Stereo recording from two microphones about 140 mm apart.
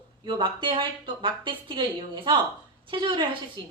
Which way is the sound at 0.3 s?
35° right (ahead or behind).